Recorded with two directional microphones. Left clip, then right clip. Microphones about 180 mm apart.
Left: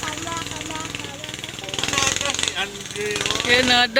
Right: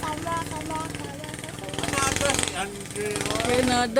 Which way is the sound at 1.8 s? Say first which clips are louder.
Left 2 dB; 75° right (ahead or behind).